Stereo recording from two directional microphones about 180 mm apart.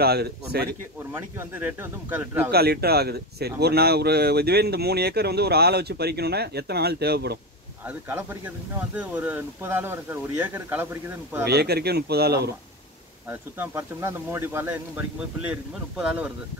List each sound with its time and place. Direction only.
0.0 s speech: 60° right (ahead or behind)
1.1 s speech: 10° right (ahead or behind)
2.5 s speech: 60° right (ahead or behind)
7.8 s speech: 10° right (ahead or behind)
11.4 s speech: 65° right (ahead or behind)
13.3 s speech: 10° right (ahead or behind)